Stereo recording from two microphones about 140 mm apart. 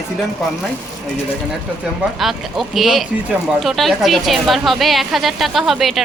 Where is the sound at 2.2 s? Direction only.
Centre (ahead or behind).